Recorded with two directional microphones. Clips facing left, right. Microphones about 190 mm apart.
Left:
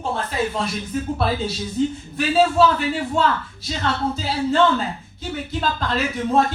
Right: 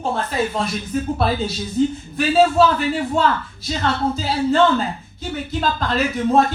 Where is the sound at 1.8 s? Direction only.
45° right (ahead or behind).